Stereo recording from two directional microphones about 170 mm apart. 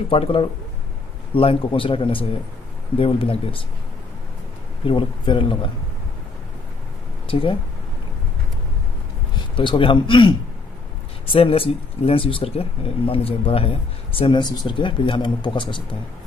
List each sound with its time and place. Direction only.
0.1 s speech: 35° left (ahead or behind)
4.8 s speech: 30° left (ahead or behind)
7.2 s speech: 30° left (ahead or behind)
9.6 s speech: 30° left (ahead or behind)